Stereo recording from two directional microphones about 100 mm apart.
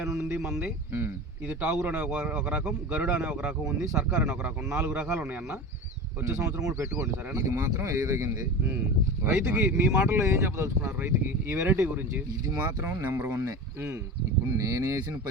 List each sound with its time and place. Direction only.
0.3 s speech: 5° right (ahead or behind)
0.6 s speech: 20° right (ahead or behind)
6.2 s speech: 30° right (ahead or behind)
12.8 s speech: 20° right (ahead or behind)
14.6 s speech: 35° right (ahead or behind)